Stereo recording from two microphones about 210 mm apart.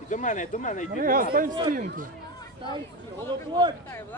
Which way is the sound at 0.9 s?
40° right (ahead or behind).